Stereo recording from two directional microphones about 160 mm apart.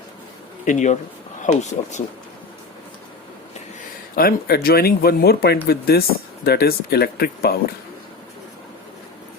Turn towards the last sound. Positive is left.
turn(degrees=75)  # may be behind; listen again after turning